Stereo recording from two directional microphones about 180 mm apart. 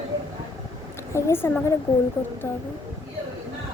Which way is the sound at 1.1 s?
15° left (ahead or behind).